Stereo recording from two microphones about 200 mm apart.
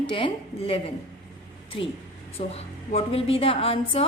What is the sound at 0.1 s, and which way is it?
Speech, 25° left (ahead or behind).